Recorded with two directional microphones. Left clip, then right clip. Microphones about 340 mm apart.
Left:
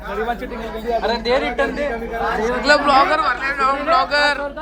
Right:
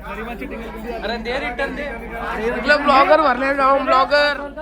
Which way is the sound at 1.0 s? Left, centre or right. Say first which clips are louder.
Left 3 dB; left.